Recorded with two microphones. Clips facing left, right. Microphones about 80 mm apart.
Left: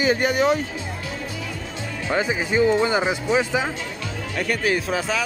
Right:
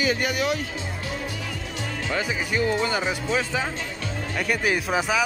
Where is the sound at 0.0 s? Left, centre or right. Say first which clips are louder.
Left 5 dB; left.